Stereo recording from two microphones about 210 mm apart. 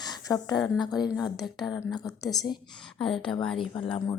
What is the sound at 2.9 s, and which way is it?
Speech, 5° left (ahead or behind).